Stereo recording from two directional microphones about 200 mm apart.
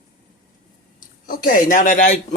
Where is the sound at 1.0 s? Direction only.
45° left (ahead or behind).